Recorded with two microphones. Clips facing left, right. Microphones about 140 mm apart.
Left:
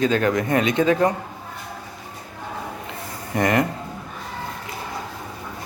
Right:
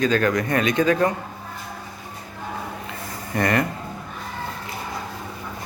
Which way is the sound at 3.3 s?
15° left (ahead or behind).